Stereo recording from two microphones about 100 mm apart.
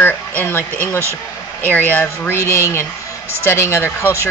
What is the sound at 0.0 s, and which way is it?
Speech, 20° left (ahead or behind).